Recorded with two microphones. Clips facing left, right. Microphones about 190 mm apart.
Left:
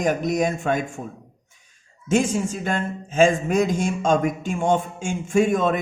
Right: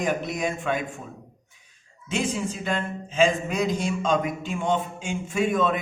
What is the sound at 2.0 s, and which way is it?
A man's voice, 45° left (ahead or behind).